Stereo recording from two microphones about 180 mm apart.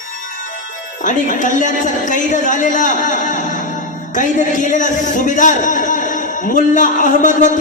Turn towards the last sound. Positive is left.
turn(degrees=45)  # may be behind; listen again after turning